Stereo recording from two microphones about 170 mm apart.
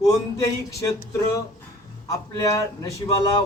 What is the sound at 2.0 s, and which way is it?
Speech, 20° left (ahead or behind).